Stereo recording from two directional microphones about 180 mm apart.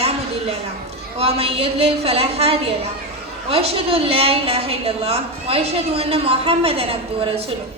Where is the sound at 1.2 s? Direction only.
35° right (ahead or behind).